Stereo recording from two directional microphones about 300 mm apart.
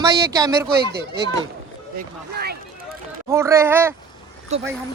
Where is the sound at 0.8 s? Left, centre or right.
Right.